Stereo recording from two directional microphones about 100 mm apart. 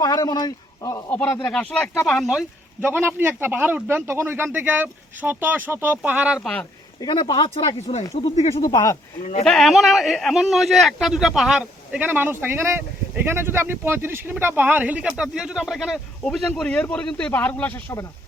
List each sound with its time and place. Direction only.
0.0 s a man's voice: 45° left (ahead or behind)
1.5 s speech: 10° left (ahead or behind)
2.0 s speech: centre (ahead or behind)
2.9 s speech: 20° right (ahead or behind)
6.4 s speech: 5° left (ahead or behind)
7.0 s speech: 55° left (ahead or behind); by 8.0 s 70° left (ahead or behind)
8.2 s speech: 85° left
8.6 s speech: 40° left (ahead or behind)
9.4 s speech: 5° left (ahead or behind)